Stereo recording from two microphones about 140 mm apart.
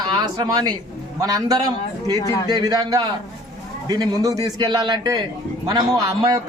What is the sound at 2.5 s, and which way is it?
A man's voice, 30° right (ahead or behind).